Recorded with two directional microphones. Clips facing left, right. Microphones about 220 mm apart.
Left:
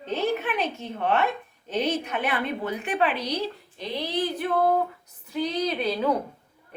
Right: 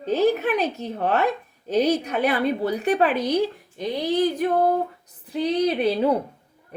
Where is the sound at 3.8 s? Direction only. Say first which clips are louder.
Right 6 dB; 45° right (ahead or behind).